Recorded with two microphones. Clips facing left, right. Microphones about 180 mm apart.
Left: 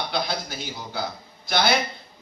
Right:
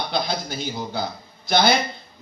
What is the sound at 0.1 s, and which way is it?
A man's voice, 20° right (ahead or behind).